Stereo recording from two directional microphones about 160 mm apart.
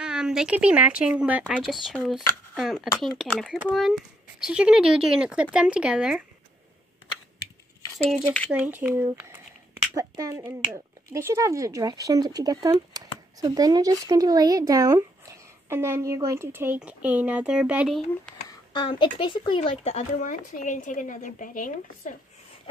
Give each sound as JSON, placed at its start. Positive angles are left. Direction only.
{"t": 0.0, "sound": "speech", "side_deg": -5}
{"t": 8.5, "sound": "speech", "side_deg": -10}
{"t": 18.5, "sound": "speech", "side_deg": 30}
{"t": 20.2, "sound": "speech", "side_deg": 55}